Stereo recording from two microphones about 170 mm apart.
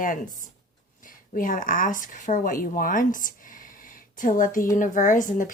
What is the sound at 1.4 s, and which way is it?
Speech, 50° left (ahead or behind).